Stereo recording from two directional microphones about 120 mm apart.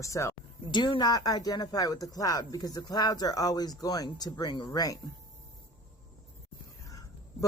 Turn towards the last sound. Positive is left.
turn(degrees=30)  # may be behind; listen again after turning